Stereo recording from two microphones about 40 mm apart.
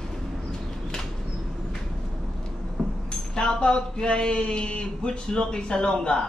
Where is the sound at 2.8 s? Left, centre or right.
Centre.